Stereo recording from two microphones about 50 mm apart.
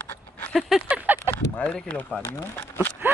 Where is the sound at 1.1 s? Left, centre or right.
Right.